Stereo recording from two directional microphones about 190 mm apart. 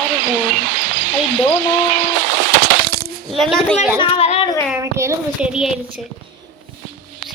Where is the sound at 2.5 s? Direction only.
50° right (ahead or behind).